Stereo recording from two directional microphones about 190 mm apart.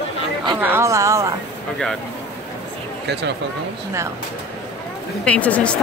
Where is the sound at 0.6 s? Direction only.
10° right (ahead or behind).